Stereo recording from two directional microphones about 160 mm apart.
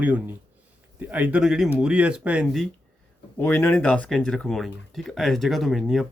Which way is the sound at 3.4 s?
15° left (ahead or behind).